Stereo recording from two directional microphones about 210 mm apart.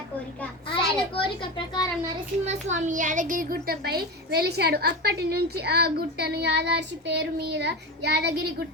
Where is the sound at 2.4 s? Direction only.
35° right (ahead or behind).